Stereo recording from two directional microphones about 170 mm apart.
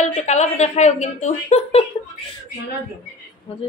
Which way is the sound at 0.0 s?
45° left (ahead or behind).